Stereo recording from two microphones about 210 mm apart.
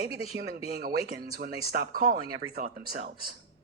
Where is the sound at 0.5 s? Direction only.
45° right (ahead or behind).